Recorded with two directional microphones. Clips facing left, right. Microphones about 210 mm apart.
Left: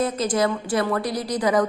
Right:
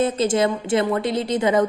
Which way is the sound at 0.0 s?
25° right (ahead or behind).